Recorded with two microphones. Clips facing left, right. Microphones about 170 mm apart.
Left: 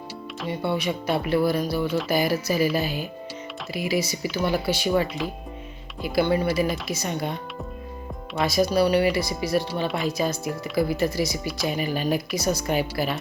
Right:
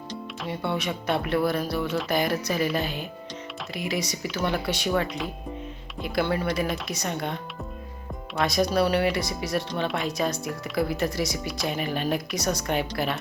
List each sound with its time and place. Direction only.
0.1 s speech: centre (ahead or behind)
8.4 s speech: centre (ahead or behind)